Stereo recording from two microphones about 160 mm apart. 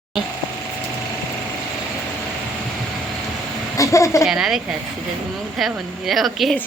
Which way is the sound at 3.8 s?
20° left (ahead or behind).